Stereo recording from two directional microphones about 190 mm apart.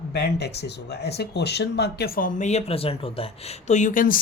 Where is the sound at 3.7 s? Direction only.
40° left (ahead or behind).